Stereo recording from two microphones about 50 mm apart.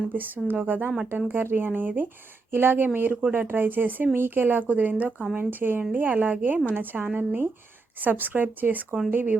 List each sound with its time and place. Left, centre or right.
0.1 s speech: right
1.4 s speech: right